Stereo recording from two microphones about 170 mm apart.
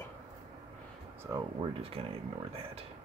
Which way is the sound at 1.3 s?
20° right (ahead or behind).